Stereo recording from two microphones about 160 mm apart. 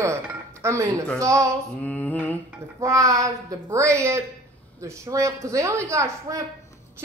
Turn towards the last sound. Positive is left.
turn(degrees=-20)  # may be behind; listen again after turning